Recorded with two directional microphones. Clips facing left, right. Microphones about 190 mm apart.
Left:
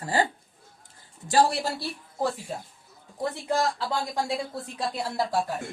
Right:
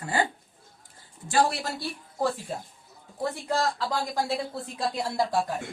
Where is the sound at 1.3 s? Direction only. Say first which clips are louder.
Left 2 dB; 35° left (ahead or behind).